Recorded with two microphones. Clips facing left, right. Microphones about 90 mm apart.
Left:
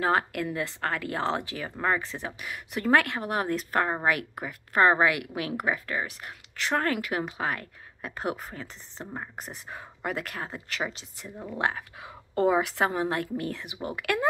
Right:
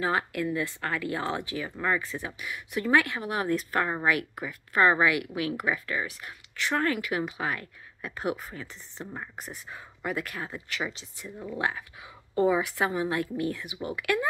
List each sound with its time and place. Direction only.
0.0 s a woman's voice: 50° left (ahead or behind); by 9.3 s 25° left (ahead or behind)
9.3 s a woman's voice: 45° left (ahead or behind)